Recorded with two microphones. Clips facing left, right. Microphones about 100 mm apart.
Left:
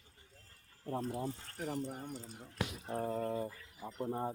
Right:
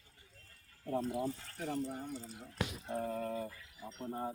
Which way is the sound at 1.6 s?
5° left (ahead or behind).